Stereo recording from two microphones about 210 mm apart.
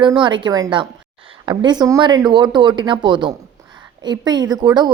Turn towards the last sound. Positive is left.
turn(degrees=-20)  # may be behind; listen again after turning